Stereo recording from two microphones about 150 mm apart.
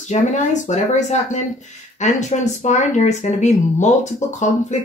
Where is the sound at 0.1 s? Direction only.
50° left (ahead or behind).